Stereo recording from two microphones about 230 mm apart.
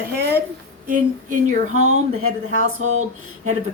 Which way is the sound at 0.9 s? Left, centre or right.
Right.